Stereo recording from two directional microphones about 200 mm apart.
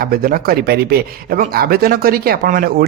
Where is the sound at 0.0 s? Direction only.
45° right (ahead or behind).